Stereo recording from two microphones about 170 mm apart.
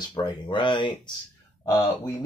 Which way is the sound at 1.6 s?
15° left (ahead or behind).